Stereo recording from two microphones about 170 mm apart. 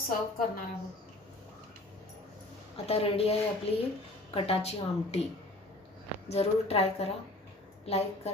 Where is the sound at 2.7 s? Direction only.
35° left (ahead or behind).